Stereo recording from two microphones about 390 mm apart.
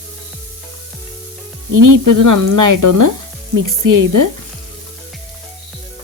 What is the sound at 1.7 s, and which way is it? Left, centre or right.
Speech, right.